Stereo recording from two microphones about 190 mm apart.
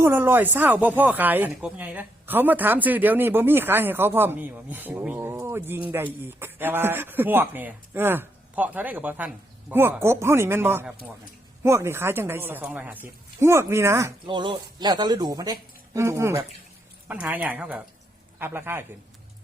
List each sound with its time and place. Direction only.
0.0 s speech: 10° right (ahead or behind)
14.3 s speech: 25° right (ahead or behind)